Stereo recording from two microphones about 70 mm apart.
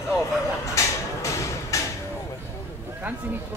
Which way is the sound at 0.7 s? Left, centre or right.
Left.